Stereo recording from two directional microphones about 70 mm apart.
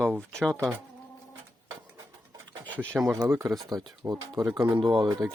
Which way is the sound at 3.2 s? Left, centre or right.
Right.